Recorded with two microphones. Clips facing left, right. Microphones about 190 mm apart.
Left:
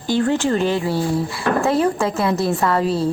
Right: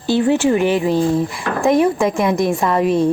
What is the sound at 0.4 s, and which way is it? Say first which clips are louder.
A woman's voice: right 4 dB; 15° right (ahead or behind).